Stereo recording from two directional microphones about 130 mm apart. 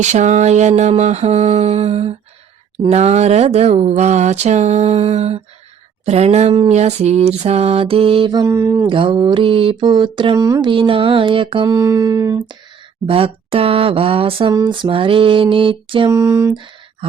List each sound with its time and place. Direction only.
0.0 s speech: 65° right (ahead or behind)
6.1 s mantra: 55° right (ahead or behind)
6.7 s mantra: 60° right (ahead or behind)
8.3 s mantra: 25° right (ahead or behind)
8.9 s a sound: 40° right (ahead or behind)
10.3 s mantra: 25° right (ahead or behind)
10.7 s a sound: 40° right (ahead or behind); by 12.5 s 25° right (ahead or behind)
13.1 s mantra: 45° right (ahead or behind)
14.5 s a sound: 35° right (ahead or behind)
16.0 s mantra: 20° right (ahead or behind)